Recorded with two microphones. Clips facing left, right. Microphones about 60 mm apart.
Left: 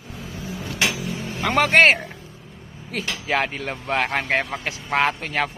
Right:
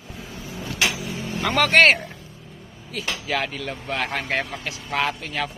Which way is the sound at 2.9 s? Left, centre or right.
Left.